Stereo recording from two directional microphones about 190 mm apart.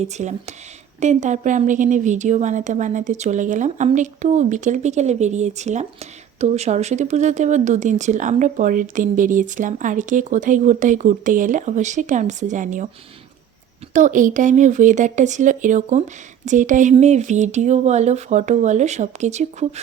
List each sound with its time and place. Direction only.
0.0 s a woman's voice: 35° right (ahead or behind)
13.9 s a woman's voice: 40° right (ahead or behind)